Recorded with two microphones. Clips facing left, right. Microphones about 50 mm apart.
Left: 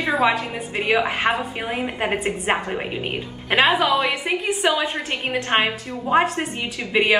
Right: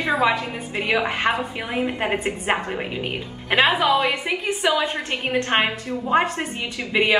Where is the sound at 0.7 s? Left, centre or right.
Centre.